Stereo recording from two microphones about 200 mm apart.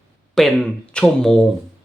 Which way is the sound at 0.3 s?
5° left (ahead or behind).